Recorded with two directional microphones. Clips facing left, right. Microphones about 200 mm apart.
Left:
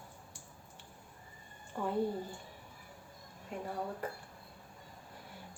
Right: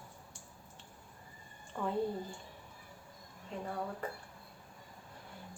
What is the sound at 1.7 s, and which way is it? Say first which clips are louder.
Speech: even; 5° left (ahead or behind).